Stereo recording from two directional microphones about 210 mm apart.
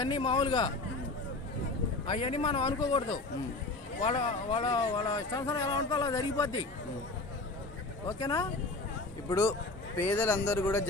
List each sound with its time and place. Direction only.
0.0 s speech: 25° left (ahead or behind)
2.0 s speech: 25° left (ahead or behind)
8.2 s a man's voice: 15° left (ahead or behind)